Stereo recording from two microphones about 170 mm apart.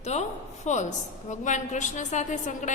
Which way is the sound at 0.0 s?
40° left (ahead or behind).